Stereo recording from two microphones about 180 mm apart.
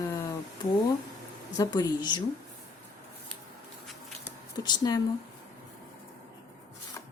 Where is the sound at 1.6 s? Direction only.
20° left (ahead or behind).